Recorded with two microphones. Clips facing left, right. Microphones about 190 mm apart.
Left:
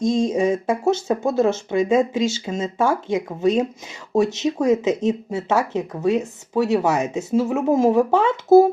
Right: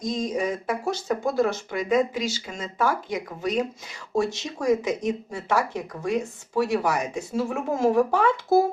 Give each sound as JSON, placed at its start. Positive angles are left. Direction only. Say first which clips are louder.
{"t": 0.0, "sound": "speech", "louder": "left 8 dB", "side_deg": 25}